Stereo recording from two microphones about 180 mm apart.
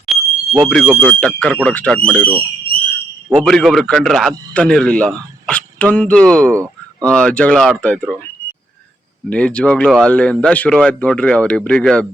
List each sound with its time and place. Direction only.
0.0 s speech: centre (ahead or behind)
3.4 s speech: centre (ahead or behind)
6.4 s speech: 15° right (ahead or behind)
7.1 s speech: 5° left (ahead or behind)
9.3 s speech: 5° left (ahead or behind)